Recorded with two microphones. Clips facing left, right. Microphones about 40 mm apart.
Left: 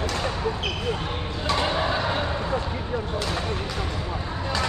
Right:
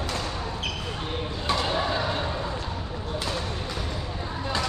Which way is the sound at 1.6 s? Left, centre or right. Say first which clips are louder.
Left 3 dB; centre.